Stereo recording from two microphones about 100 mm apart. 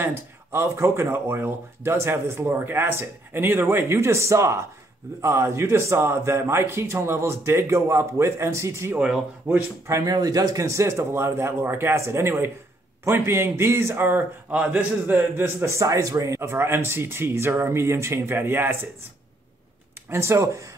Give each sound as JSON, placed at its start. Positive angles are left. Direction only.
{"t": 0.0, "sound": "a man's voice", "side_deg": -25}
{"t": 20.1, "sound": "a man's voice", "side_deg": -25}